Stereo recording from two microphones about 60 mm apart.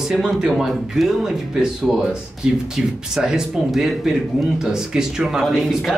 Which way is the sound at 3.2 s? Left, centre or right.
Centre.